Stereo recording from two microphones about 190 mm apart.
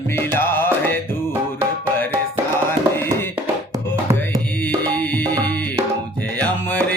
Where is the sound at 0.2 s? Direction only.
10° left (ahead or behind).